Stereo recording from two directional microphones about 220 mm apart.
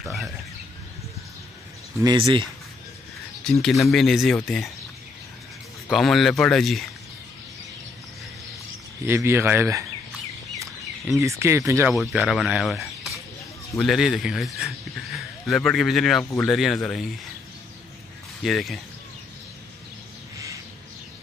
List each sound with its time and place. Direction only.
0.0 s speech: centre (ahead or behind)
2.0 s speech: 15° right (ahead or behind)
3.6 s speech: centre (ahead or behind)
5.9 s speech: centre (ahead or behind)
9.0 s speech: 10° right (ahead or behind)
11.1 s speech: 10° right (ahead or behind)
11.9 s speech: centre (ahead or behind)
18.4 s speech: centre (ahead or behind)